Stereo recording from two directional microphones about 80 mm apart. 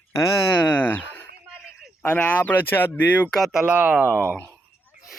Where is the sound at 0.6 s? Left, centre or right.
Left.